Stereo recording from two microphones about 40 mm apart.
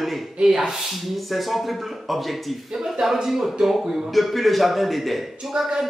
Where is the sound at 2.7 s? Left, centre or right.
Centre.